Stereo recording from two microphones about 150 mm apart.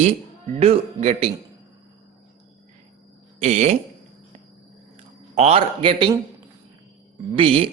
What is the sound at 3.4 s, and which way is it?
Speech, 50° right (ahead or behind).